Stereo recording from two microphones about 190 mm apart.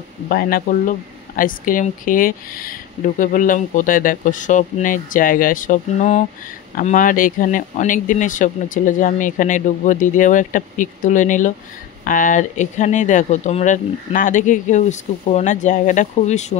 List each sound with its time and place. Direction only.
0.3 s speech: 50° left (ahead or behind)